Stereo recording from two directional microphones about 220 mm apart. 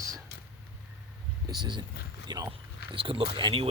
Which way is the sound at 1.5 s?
20° right (ahead or behind).